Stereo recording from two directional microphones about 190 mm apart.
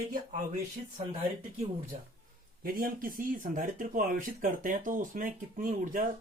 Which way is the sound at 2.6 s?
50° right (ahead or behind).